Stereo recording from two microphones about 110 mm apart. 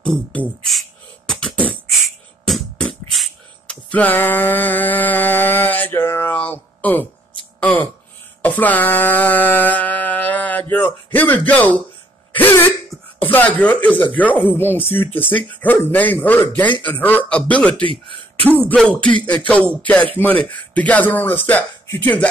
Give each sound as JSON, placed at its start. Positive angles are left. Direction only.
{"t": 0.0, "sound": "speech", "side_deg": 10}
{"t": 0.7, "sound": "beatboxing", "side_deg": 5}
{"t": 2.4, "sound": "music", "side_deg": 5}
{"t": 3.6, "sound": "music", "side_deg": 15}
{"t": 7.6, "sound": "a sound", "side_deg": 15}
{"t": 8.4, "sound": "music", "side_deg": 15}
{"t": 12.4, "sound": "throat clearing", "side_deg": 20}
{"t": 13.3, "sound": "speech", "side_deg": 15}